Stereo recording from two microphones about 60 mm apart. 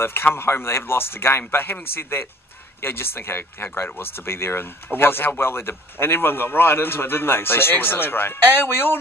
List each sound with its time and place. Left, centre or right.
0.0 s a man's voice: left